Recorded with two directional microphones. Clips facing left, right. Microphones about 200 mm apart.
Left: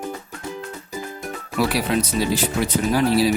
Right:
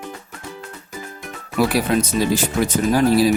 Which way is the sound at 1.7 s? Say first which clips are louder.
Right 3 dB; 45° right (ahead or behind).